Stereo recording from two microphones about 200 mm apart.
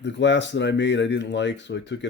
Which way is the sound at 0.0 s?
65° left (ahead or behind).